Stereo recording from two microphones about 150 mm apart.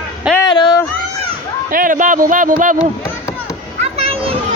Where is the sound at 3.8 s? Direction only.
40° right (ahead or behind).